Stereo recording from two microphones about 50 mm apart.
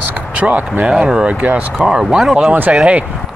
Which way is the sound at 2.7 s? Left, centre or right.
Right.